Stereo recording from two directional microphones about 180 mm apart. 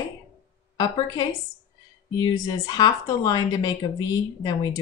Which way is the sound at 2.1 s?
20° left (ahead or behind).